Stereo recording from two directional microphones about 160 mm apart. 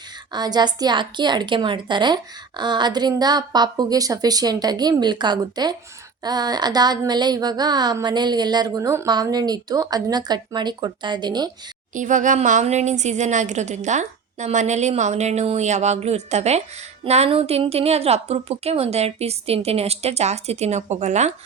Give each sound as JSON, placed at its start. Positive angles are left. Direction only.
{"t": 0.3, "sound": "a woman's voice", "side_deg": -25}
{"t": 11.9, "sound": "a woman's voice", "side_deg": -50}